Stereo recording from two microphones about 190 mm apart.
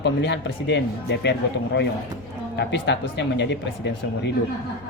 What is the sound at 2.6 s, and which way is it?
Speech, 65° left (ahead or behind).